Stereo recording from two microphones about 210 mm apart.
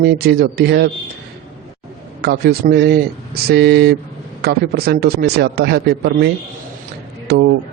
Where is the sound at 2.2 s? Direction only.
50° right (ahead or behind).